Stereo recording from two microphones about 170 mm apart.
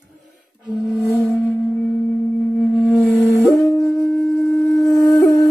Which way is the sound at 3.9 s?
20° left (ahead or behind).